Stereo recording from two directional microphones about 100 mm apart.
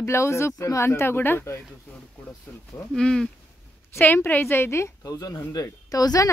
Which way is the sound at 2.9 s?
5° left (ahead or behind).